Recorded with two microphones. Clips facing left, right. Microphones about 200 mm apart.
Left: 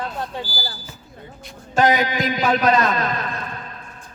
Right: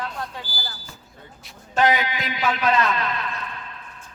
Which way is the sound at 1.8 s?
40° left (ahead or behind).